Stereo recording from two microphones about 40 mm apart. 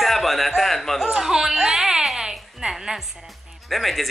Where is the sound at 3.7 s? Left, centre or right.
Centre.